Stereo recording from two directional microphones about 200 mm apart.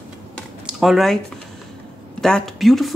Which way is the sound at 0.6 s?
Centre (ahead or behind).